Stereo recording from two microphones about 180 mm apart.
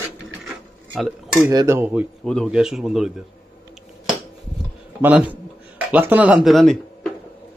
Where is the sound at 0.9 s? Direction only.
Centre (ahead or behind).